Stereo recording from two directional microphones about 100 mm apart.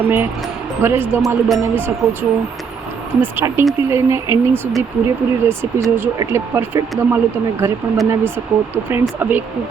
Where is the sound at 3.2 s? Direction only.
25° right (ahead or behind).